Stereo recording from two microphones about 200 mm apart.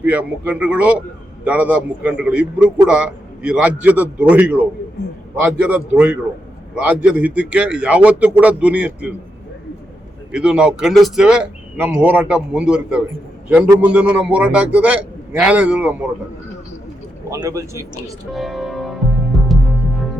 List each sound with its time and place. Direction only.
0.0 s a man's voice: 5° right (ahead or behind)
10.3 s speech: 5° right (ahead or behind)
17.2 s a man's voice: 15° right (ahead or behind)
18.3 s music: centre (ahead or behind)